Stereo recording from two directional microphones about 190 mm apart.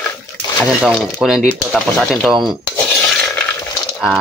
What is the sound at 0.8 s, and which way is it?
Speech, centre (ahead or behind).